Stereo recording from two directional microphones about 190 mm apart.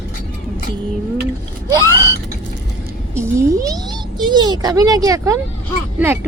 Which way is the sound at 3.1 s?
15° right (ahead or behind).